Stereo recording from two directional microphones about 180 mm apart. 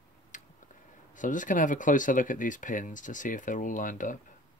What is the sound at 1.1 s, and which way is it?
Speech, 45° left (ahead or behind).